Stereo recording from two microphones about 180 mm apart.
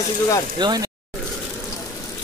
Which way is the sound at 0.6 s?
25° right (ahead or behind).